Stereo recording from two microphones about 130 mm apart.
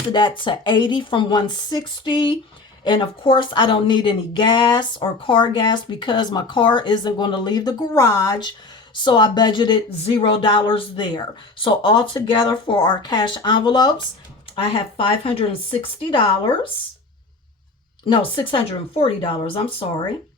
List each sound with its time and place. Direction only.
0.1 s speech: 35° left (ahead or behind)
18.0 s speech: 40° left (ahead or behind)